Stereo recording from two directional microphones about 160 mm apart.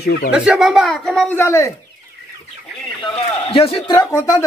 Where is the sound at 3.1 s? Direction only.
35° left (ahead or behind).